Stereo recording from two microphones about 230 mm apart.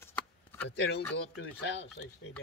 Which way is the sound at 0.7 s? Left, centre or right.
Left.